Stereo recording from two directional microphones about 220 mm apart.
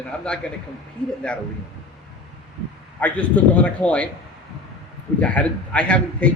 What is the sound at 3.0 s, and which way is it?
A man's voice, 5° left (ahead or behind).